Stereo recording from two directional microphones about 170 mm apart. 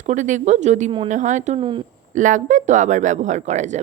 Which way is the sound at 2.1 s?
50° right (ahead or behind).